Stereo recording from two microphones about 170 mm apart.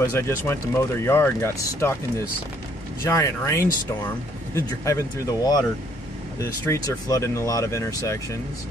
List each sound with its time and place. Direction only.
0.1 s speech: 15° left (ahead or behind)
3.0 s speech: 15° left (ahead or behind)